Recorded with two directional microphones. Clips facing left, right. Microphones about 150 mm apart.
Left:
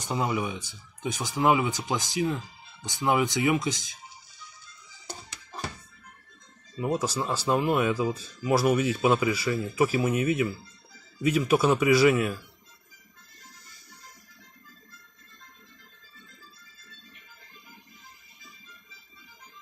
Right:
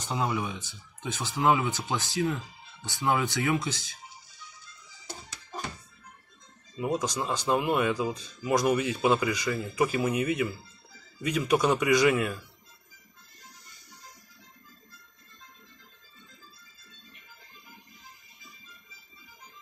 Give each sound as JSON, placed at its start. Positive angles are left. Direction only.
{"t": 0.0, "sound": "speech", "side_deg": 10}
{"t": 6.9, "sound": "speech", "side_deg": 5}